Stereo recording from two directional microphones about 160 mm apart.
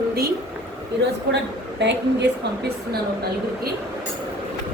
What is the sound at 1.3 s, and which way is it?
Speech, 90° right.